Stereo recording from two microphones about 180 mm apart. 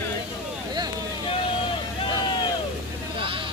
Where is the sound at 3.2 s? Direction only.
30° right (ahead or behind).